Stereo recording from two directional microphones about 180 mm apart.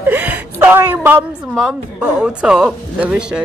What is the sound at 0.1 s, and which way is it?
A man's voice, 10° right (ahead or behind).